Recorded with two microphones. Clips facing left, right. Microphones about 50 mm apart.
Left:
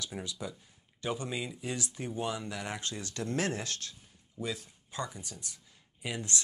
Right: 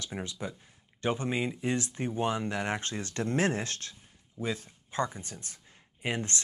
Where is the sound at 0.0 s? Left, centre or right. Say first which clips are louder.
Right 2 dB; right.